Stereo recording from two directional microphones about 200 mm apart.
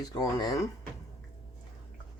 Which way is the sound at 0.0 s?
20° left (ahead or behind).